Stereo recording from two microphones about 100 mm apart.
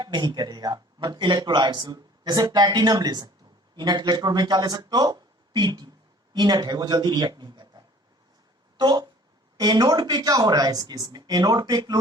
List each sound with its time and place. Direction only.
0.0 s speech: 45° right (ahead or behind)
8.8 s speech: 45° right (ahead or behind)